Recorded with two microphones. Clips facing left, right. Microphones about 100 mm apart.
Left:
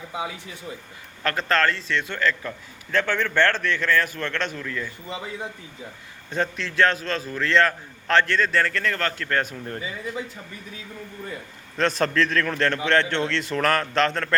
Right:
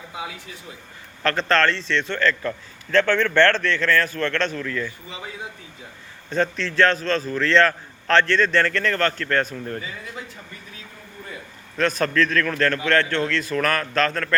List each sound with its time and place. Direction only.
1.2 s a man's voice: 10° left (ahead or behind)
6.3 s a man's voice: 15° left (ahead or behind)
11.8 s a man's voice: 30° left (ahead or behind)